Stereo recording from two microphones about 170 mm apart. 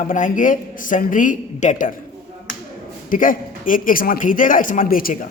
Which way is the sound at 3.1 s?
50° left (ahead or behind).